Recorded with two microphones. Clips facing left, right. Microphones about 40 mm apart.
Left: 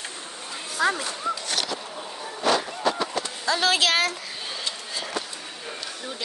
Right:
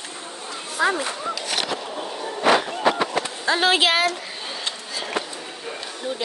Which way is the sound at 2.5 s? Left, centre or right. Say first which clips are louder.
Right 5 dB; right.